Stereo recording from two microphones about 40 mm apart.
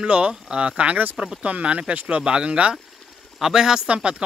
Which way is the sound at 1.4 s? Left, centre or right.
Right.